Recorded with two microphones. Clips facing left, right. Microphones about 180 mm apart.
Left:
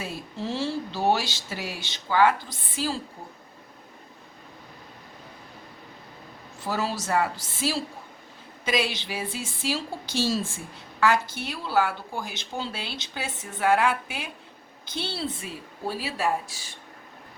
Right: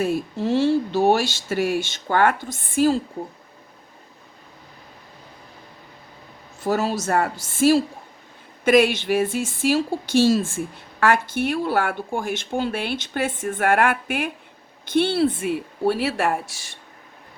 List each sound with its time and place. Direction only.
0.0 s speech: 50° right (ahead or behind)
6.7 s a woman's voice: 45° right (ahead or behind); by 16.4 s 75° right (ahead or behind)